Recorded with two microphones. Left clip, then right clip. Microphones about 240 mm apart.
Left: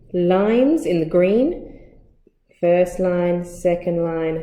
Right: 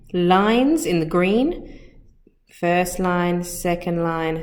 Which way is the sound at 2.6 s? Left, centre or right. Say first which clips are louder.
Left 3 dB; centre.